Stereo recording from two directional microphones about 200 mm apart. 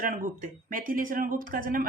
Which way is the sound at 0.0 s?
45° right (ahead or behind).